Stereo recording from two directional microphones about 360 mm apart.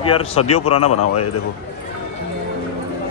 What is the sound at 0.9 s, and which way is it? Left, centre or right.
Speech, left.